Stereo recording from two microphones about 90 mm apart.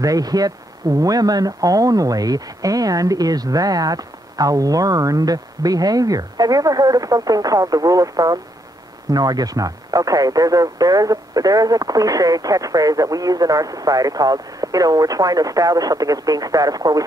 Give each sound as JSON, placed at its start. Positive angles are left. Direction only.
{"t": 0.0, "sound": "speech", "side_deg": -45}